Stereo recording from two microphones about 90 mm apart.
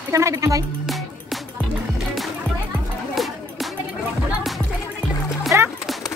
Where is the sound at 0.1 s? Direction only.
35° right (ahead or behind).